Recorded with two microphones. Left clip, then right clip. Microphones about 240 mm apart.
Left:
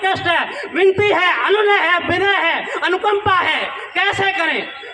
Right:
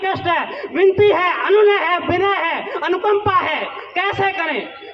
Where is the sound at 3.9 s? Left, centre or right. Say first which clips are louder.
Left 1 dB; left.